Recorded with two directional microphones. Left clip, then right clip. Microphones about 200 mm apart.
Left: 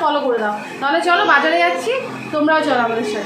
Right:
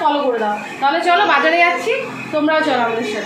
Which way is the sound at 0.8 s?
10° left (ahead or behind).